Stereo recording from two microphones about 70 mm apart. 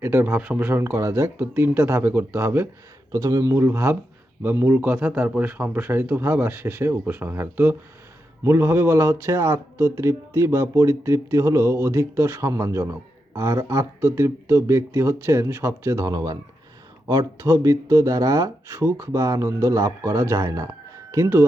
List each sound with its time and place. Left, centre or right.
0.0 s speech: right
0.6 s speech: right
3.1 s speech: right
3.5 s a man's voice: right
16.1 s speech: right
17.4 s speech: right